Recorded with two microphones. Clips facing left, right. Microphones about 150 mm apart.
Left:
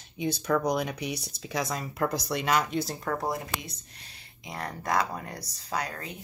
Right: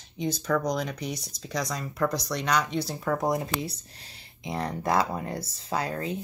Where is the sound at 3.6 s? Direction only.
30° right (ahead or behind).